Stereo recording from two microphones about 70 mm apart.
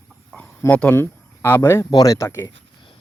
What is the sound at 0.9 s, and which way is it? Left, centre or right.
Speech, left.